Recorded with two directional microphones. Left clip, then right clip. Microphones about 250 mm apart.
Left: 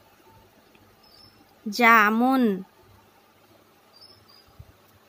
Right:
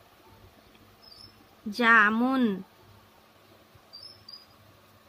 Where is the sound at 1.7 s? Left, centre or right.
Left.